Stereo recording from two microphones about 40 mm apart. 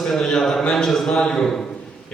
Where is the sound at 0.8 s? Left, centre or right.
Centre.